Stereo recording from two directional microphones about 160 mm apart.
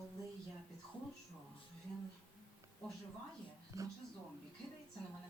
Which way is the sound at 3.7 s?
20° right (ahead or behind).